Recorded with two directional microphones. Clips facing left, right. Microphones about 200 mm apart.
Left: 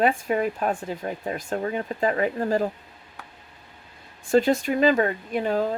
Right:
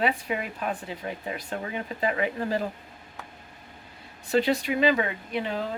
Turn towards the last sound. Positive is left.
turn(degrees=45)  # may be behind; listen again after turning